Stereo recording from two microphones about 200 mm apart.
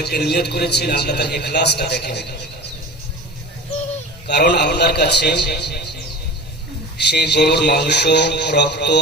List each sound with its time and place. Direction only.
0.0 s a man's voice: 55° left (ahead or behind)
4.3 s a man's voice: 55° left (ahead or behind)
6.9 s a man's voice: 55° left (ahead or behind)